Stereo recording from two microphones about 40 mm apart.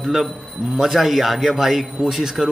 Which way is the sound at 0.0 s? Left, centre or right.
Centre.